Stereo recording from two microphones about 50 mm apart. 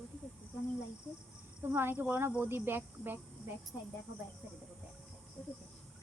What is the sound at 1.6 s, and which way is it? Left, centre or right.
Speech, right.